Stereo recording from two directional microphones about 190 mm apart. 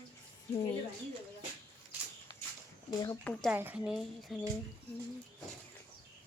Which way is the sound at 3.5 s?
10° right (ahead or behind).